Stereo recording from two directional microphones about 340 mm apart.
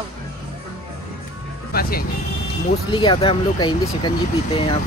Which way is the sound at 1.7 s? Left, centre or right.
Left.